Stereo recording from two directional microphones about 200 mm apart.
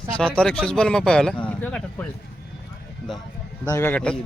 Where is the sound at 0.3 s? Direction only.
5° left (ahead or behind).